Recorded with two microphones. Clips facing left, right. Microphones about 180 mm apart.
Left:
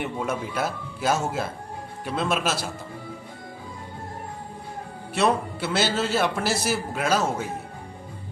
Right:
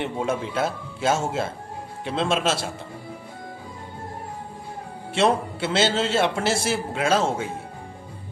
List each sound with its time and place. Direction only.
0.0 s a man's voice: 25° right (ahead or behind)
5.1 s a man's voice: 25° right (ahead or behind)